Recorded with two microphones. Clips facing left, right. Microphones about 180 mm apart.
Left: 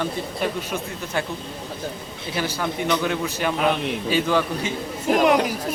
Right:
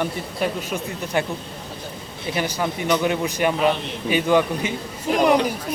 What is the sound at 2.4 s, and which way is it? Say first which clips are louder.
Speech: right 1 dB; 15° right (ahead or behind).